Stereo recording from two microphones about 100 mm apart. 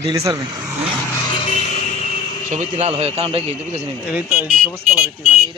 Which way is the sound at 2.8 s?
90° right.